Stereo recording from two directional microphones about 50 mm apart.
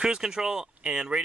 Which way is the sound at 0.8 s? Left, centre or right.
Centre.